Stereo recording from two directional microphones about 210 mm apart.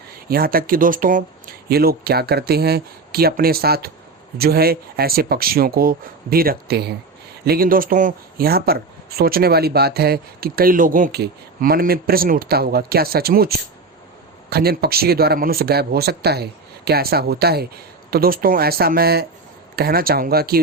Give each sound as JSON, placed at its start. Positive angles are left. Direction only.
{"t": 0.3, "sound": "speech", "side_deg": -45}
{"t": 14.5, "sound": "speech", "side_deg": -50}